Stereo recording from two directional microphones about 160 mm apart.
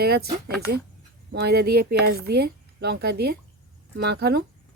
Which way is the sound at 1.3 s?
85° right.